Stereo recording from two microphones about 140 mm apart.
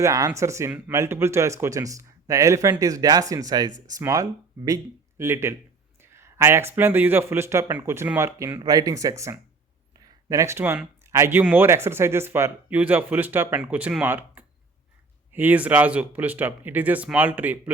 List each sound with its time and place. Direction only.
0.0 s speech: 20° right (ahead or behind)
6.0 s a sound: 20° right (ahead or behind)
6.7 s speech: 15° right (ahead or behind)